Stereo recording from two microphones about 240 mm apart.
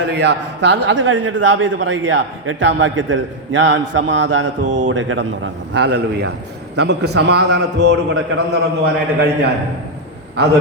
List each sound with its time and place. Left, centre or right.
0.0 s a man's voice: right